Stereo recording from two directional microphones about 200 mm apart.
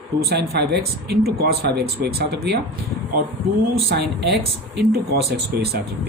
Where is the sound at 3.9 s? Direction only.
55° right (ahead or behind).